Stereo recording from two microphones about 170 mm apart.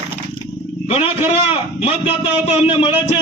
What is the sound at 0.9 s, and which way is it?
A man's voice, 35° left (ahead or behind).